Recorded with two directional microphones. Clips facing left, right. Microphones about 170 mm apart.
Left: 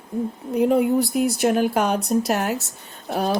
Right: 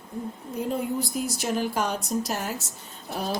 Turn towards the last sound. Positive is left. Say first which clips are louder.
# left 7 dB
turn(degrees=65)  # may be behind; listen again after turning